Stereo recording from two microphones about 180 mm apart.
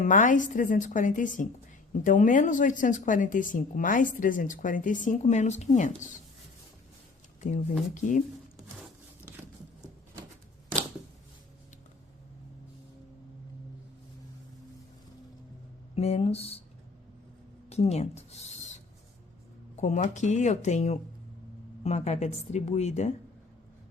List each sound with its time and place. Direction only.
0.0 s speech: 45° left (ahead or behind)
7.4 s speech: 45° left (ahead or behind)
16.0 s speech: 35° left (ahead or behind)
17.7 s a sound: 35° left (ahead or behind)
19.7 s speech: 40° left (ahead or behind)